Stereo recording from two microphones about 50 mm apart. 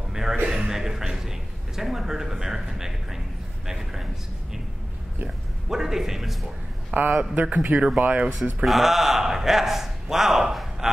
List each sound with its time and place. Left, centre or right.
0.1 s a sound: centre
0.5 s a man's voice: centre
5.7 s a man's voice: centre
6.9 s a man's voice: right
8.6 s a man's voice: centre